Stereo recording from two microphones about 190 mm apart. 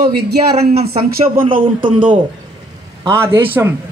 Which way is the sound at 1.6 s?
25° right (ahead or behind).